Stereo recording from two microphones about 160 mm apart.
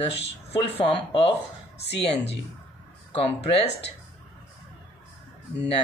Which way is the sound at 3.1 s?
35° left (ahead or behind).